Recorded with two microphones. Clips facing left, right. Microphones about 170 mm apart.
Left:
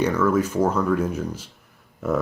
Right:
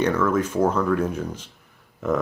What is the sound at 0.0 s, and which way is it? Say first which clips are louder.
Speech: left 1 dB; 10° left (ahead or behind).